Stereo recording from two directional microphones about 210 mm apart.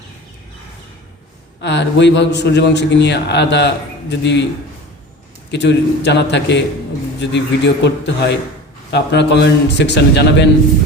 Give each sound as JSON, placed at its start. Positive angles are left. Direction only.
{"t": 1.6, "sound": "a man's voice", "side_deg": 55}
{"t": 5.5, "sound": "a man's voice", "side_deg": 55}